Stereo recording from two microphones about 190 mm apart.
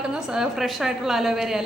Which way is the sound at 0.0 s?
5° right (ahead or behind).